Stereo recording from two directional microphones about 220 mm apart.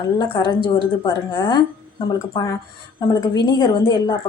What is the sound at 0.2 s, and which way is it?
A woman's voice, 20° left (ahead or behind).